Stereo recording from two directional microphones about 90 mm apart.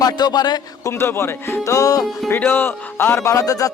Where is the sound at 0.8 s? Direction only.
30° left (ahead or behind).